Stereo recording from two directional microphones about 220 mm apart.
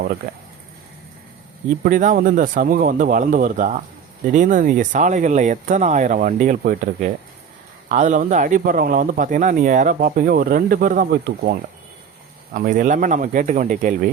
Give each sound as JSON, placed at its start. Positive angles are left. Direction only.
{"t": 1.8, "sound": "speech", "side_deg": -35}
{"t": 12.5, "sound": "speech", "side_deg": -35}